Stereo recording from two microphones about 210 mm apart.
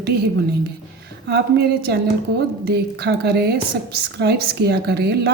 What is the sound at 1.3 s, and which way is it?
A woman's voice, 55° right (ahead or behind).